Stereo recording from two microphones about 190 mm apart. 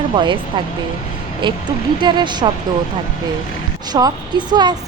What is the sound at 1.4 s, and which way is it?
A woman's voice, 25° right (ahead or behind).